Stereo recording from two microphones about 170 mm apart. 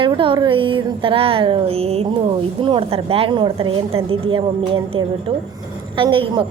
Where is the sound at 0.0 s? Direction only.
30° right (ahead or behind).